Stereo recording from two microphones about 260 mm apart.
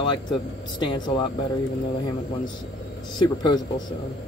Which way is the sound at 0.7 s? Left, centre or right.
Centre.